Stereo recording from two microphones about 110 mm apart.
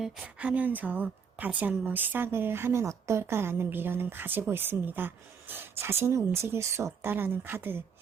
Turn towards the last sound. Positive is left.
turn(degrees=-20)  # may be behind; listen again after turning